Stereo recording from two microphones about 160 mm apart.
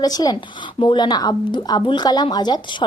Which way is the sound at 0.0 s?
25° left (ahead or behind).